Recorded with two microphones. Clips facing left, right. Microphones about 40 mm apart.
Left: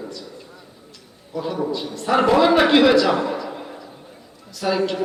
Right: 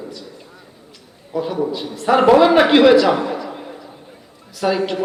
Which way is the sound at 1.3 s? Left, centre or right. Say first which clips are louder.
Right 3 dB; centre.